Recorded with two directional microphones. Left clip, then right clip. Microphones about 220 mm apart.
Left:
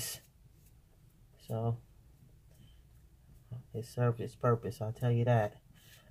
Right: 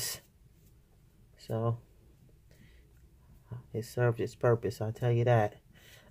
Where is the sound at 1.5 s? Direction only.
35° right (ahead or behind).